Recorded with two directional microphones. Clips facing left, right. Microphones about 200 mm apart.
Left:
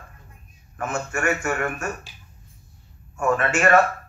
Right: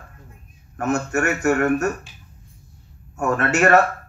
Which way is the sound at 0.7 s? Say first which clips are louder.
Right 6 dB; 65° right (ahead or behind).